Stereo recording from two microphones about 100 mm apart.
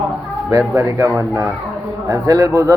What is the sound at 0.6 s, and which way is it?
Speech, 15° right (ahead or behind).